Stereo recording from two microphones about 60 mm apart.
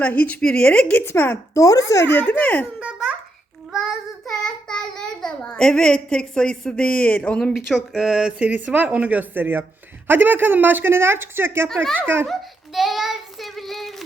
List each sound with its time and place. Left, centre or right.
0.0 s a woman's voice: left
1.0 s a woman's voice: left
1.5 s speech: left
2.3 s a woman's voice: left
2.8 s babbling: centre
4.3 s child singing: centre
7.5 s a sound: centre
8.4 s a woman's voice: right
12.3 s child singing: centre